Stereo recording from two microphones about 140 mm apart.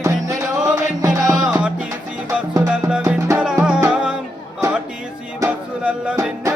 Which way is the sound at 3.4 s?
5° right (ahead or behind).